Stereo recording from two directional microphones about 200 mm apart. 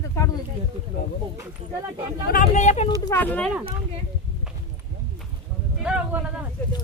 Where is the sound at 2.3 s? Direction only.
40° left (ahead or behind).